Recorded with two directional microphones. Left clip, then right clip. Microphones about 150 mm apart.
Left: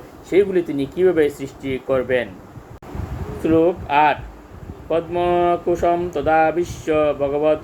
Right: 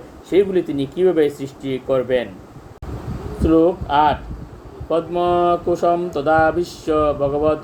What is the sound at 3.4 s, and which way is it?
Speech, 10° left (ahead or behind).